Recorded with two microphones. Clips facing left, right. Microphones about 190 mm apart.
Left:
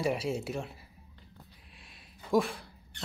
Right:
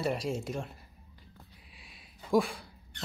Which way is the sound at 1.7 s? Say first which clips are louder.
Even; centre (ahead or behind).